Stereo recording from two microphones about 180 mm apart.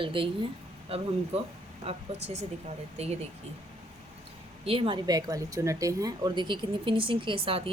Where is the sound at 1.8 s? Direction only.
35° right (ahead or behind).